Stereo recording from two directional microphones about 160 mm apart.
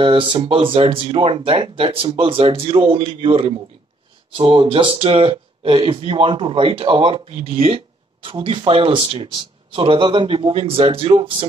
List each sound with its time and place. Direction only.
0.0 s speech: 35° right (ahead or behind)